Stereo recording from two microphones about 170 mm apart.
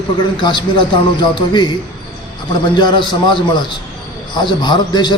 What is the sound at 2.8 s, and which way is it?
Speech, 25° left (ahead or behind).